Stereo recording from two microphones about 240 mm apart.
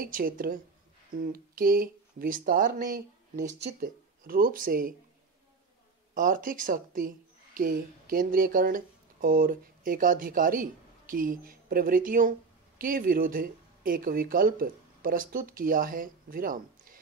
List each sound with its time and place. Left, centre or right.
0.0 s speech: right
6.1 s speech: right